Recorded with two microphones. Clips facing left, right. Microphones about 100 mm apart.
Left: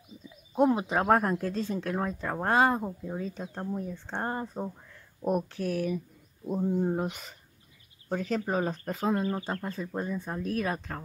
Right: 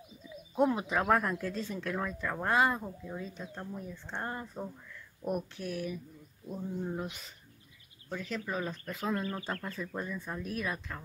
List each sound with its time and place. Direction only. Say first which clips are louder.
0.6 s speech: left 4 dB; 25° left (ahead or behind); by 7.3 s 55° left (ahead or behind)
8.1 s speech: left 7 dB; 45° left (ahead or behind)
9.1 s speech: left 3 dB; 25° left (ahead or behind); by 11.0 s 40° left (ahead or behind)